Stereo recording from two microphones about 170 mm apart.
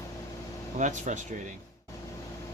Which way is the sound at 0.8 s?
45° right (ahead or behind).